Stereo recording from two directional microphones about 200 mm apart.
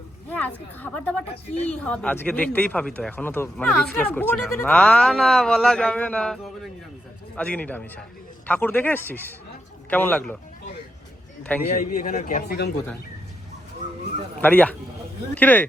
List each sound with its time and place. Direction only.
0.3 s a sound: 10° left (ahead or behind)
0.8 s speech: 5° left (ahead or behind)
1.3 s a woman's voice: 30° left (ahead or behind)
1.6 s speech: 5° left (ahead or behind)
11.7 s a man's voice: 45° left (ahead or behind)
14.4 s speech: 10° left (ahead or behind)